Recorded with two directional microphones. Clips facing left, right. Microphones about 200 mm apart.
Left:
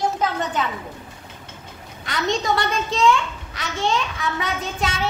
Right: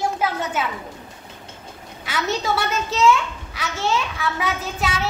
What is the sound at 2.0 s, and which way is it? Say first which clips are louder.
A child's voice: left 1 dB; 5° right (ahead or behind).